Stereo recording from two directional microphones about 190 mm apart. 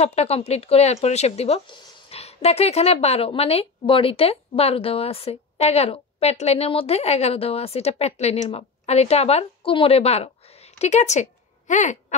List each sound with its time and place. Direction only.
0.0 s a woman's voice: 35° left (ahead or behind)